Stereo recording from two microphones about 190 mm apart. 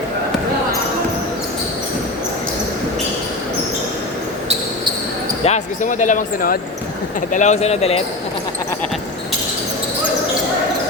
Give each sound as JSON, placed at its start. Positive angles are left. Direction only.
{"t": 5.5, "sound": "speech", "side_deg": 40}